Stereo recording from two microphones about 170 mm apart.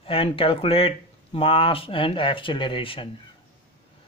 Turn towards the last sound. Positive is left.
turn(degrees=30)  # may be behind; listen again after turning